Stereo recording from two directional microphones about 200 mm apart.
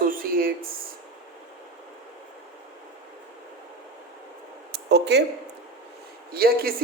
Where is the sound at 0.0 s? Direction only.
45° right (ahead or behind).